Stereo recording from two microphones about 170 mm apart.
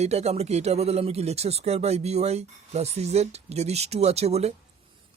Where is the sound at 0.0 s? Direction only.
40° right (ahead or behind).